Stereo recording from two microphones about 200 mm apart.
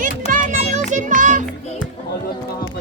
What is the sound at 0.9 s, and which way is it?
Music, 40° right (ahead or behind).